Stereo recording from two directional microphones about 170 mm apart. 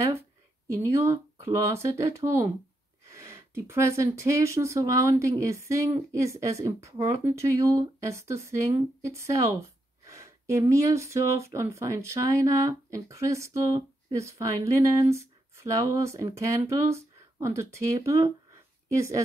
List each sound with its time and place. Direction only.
0.7 s speech: 15° right (ahead or behind)